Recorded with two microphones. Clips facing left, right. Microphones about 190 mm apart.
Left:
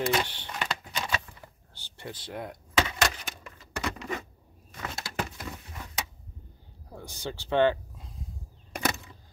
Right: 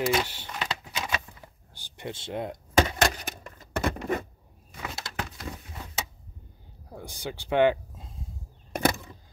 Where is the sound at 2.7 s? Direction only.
40° right (ahead or behind).